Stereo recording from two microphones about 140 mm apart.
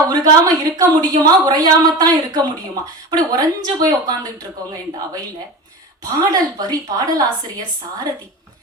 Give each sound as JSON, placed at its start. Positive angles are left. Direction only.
{"t": 0.1, "sound": "a woman's voice", "side_deg": -25}
{"t": 6.1, "sound": "a woman's voice", "side_deg": -25}